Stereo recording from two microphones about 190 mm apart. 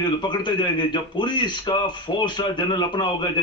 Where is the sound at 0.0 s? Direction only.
25° left (ahead or behind).